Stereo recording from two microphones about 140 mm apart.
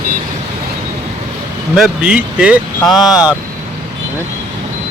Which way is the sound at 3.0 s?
25° left (ahead or behind).